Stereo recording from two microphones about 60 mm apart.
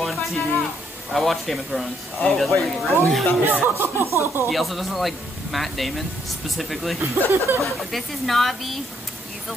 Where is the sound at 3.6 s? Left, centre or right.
Right.